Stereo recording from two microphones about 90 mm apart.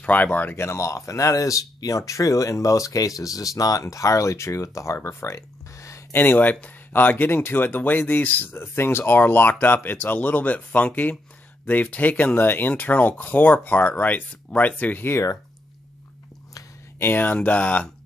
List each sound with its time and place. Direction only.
0.0 s speech: 20° left (ahead or behind); by 6.2 s 35° left (ahead or behind)
6.2 s speech: 20° left (ahead or behind)
17.0 s speech: 20° left (ahead or behind)